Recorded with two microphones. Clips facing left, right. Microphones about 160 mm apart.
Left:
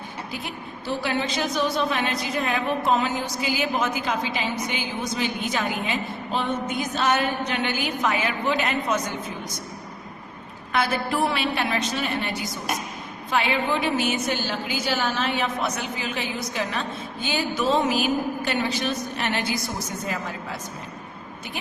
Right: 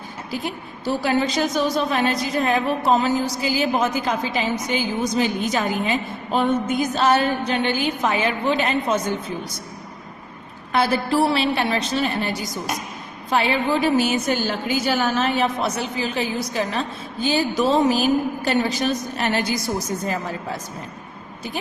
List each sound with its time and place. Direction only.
0.4 s a woman's voice: 40° right (ahead or behind)
6.3 s music: 45° right (ahead or behind)
6.9 s a woman's voice: 35° right (ahead or behind)
10.7 s a woman's voice: 35° right (ahead or behind)